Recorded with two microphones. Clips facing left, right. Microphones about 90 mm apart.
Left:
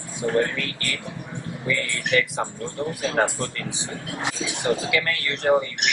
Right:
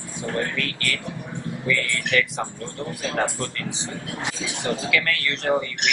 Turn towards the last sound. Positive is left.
turn(degrees=20)  # may be behind; listen again after turning